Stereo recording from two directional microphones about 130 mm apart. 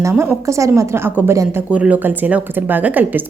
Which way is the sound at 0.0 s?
20° right (ahead or behind).